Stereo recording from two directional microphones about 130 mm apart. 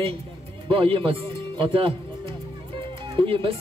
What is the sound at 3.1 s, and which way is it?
Speech, 45° right (ahead or behind).